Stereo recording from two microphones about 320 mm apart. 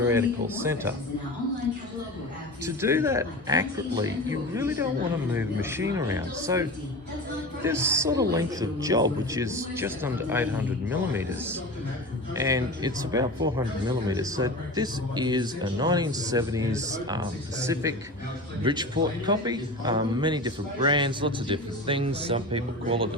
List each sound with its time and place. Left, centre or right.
0.1 s speech: centre
2.6 s speech: centre